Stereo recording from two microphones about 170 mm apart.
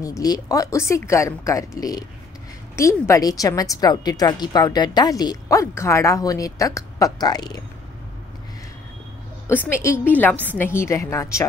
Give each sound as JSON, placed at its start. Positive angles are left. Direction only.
{"t": 0.0, "sound": "a woman's voice", "side_deg": 20}
{"t": 9.5, "sound": "a woman's voice", "side_deg": 15}